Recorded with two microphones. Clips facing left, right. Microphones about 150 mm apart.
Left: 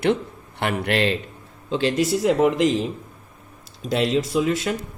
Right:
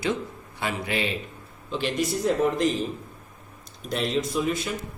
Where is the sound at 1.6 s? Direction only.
90° left.